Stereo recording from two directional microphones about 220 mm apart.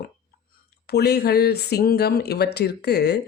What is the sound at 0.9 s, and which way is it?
Speech, 50° left (ahead or behind).